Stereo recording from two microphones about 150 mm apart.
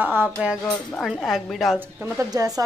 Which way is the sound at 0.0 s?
10° right (ahead or behind).